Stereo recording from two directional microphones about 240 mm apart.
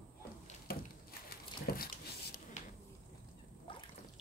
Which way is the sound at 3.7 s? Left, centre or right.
Left.